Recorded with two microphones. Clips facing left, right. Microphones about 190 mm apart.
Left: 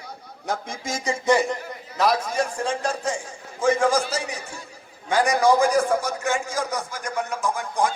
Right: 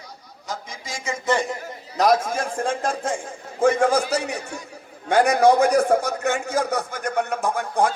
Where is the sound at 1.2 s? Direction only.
10° left (ahead or behind).